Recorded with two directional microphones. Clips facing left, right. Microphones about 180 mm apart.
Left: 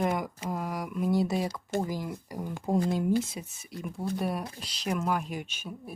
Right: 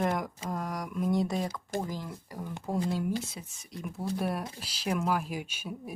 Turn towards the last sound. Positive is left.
turn(degrees=-10)  # may be behind; listen again after turning